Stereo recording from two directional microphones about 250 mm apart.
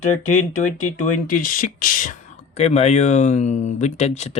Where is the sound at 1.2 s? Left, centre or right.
Left.